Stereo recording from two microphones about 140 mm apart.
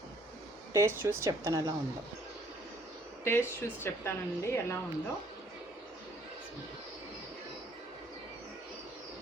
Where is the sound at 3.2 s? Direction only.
15° left (ahead or behind).